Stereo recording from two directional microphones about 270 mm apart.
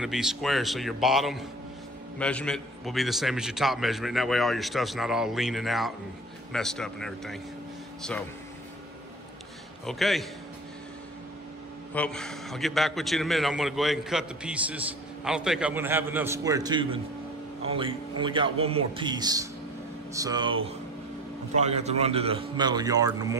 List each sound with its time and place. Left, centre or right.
0.0 s a man's voice: centre
9.8 s a man's voice: centre
11.9 s a man's voice: centre
21.5 s a man's voice: right